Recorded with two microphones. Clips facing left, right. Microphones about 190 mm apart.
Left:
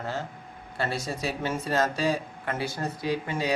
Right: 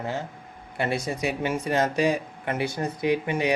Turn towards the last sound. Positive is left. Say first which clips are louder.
# right 5 dB
turn(degrees=-20)  # may be behind; listen again after turning